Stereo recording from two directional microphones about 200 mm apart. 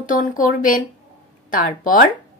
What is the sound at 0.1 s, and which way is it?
Speech, 45° left (ahead or behind).